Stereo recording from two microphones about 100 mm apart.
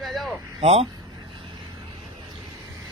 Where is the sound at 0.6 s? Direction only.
90° right.